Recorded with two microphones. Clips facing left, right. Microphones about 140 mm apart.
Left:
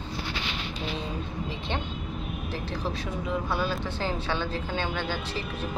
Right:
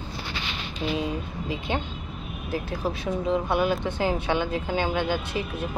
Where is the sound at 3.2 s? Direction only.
20° right (ahead or behind).